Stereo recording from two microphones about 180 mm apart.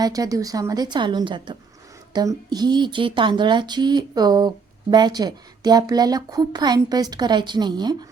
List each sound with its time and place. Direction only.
0.0 s speech: 20° right (ahead or behind)